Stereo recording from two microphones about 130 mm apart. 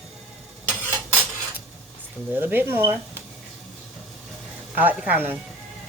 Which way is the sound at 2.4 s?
15° right (ahead or behind).